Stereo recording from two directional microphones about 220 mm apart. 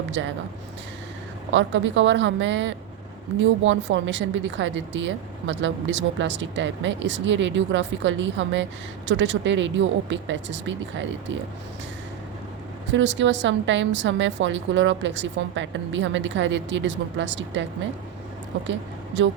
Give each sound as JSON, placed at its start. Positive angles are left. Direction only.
{"t": 0.2, "sound": "speech", "side_deg": -55}
{"t": 1.5, "sound": "speech", "side_deg": -60}
{"t": 12.9, "sound": "speech", "side_deg": -55}